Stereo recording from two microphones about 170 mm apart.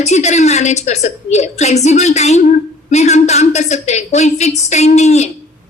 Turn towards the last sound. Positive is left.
turn(degrees=40)  # may be behind; listen again after turning